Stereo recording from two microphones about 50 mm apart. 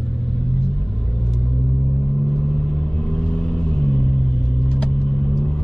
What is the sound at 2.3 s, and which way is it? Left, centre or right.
Vehicle, centre.